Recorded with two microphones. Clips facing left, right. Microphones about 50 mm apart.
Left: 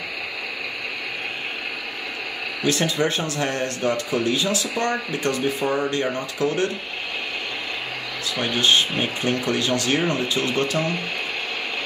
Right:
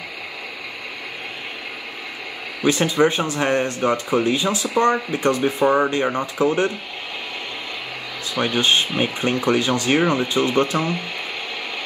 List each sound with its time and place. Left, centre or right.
2.6 s speech: centre
8.5 s speech: centre